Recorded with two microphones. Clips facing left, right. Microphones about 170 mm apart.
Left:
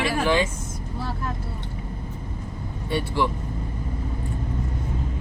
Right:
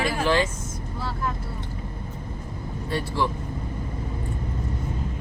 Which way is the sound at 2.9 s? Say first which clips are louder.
Left 2 dB; centre (ahead or behind).